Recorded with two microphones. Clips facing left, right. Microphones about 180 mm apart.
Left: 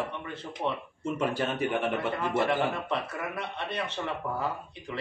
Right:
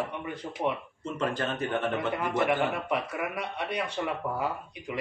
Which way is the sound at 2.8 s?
15° right (ahead or behind).